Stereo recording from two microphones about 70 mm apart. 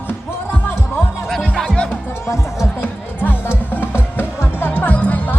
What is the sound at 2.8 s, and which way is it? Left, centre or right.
Music, left.